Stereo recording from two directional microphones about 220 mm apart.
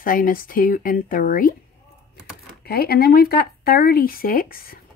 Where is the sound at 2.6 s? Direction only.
45° left (ahead or behind).